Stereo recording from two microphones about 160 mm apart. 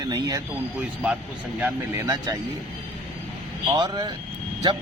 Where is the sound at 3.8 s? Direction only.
25° right (ahead or behind).